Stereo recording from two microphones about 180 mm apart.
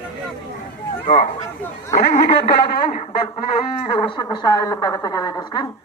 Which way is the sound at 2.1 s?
30° left (ahead or behind).